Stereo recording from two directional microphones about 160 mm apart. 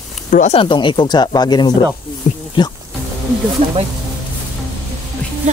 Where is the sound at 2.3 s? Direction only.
50° left (ahead or behind).